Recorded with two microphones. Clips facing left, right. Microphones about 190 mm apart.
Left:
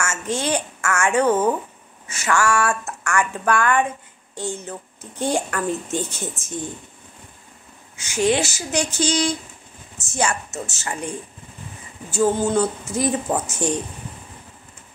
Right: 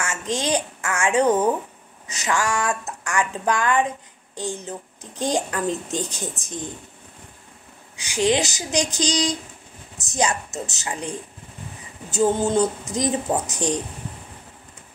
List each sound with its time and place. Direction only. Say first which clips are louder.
0.3 s a woman's voice: even; 15° right (ahead or behind)
7.9 s a woman's voice: left 1 dB; 15° right (ahead or behind)